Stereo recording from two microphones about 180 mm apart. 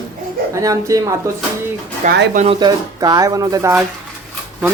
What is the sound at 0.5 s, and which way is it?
Speech, 20° right (ahead or behind).